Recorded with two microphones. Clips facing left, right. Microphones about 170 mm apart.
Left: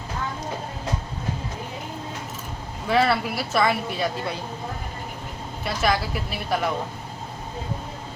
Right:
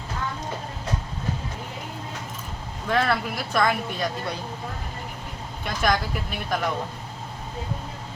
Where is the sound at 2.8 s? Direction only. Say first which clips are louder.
Left 3 dB; 5° left (ahead or behind).